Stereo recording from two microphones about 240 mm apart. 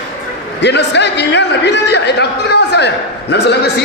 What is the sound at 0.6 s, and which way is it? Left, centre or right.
A man's voice, left.